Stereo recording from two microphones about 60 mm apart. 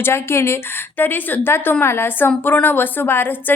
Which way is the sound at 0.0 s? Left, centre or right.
Left.